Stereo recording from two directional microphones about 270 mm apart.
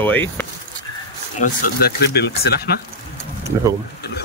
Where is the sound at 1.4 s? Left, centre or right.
Left.